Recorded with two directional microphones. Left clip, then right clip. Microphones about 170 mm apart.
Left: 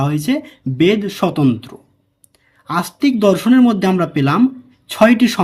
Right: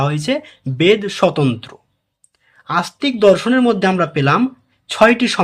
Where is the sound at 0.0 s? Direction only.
10° left (ahead or behind).